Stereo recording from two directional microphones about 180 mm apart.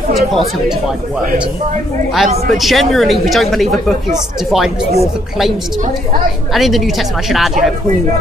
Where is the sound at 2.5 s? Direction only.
Centre (ahead or behind).